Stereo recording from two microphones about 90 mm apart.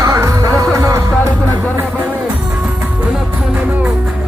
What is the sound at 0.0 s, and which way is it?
Music, 35° right (ahead or behind).